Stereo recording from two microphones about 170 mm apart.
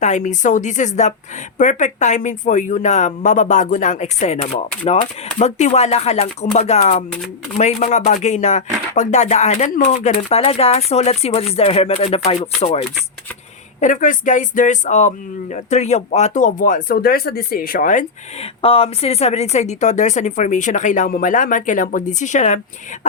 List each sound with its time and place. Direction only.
0.0 s speech: 45° left (ahead or behind)
13.7 s speech: 50° left (ahead or behind)
18.6 s speech: 35° left (ahead or behind)